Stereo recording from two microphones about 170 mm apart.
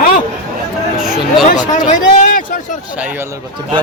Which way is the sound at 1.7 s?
50° left (ahead or behind).